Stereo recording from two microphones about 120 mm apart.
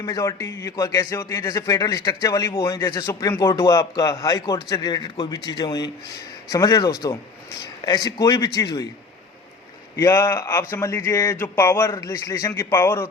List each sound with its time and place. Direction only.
0.0 s a man's voice: 30° left (ahead or behind)
9.9 s a man's voice: 25° left (ahead or behind)